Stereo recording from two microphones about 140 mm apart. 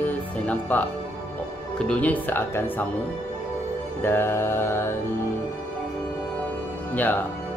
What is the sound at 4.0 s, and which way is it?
Speech, 15° left (ahead or behind).